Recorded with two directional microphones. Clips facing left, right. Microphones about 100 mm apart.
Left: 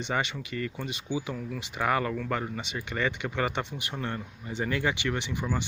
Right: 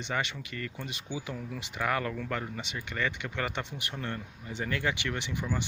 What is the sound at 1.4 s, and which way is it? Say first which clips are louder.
Speech: left 3 dB; 5° right (ahead or behind).